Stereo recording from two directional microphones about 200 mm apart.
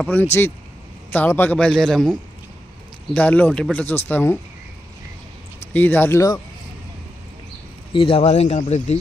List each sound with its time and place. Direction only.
0.0 s a man's voice: 10° left (ahead or behind)
5.6 s speech: 10° left (ahead or behind)
7.9 s speech: 25° left (ahead or behind)